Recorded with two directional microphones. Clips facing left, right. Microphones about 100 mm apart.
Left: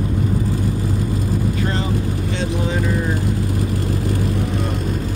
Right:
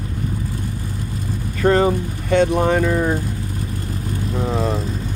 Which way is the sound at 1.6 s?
50° right (ahead or behind).